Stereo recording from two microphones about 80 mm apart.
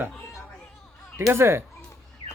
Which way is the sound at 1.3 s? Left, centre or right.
Right.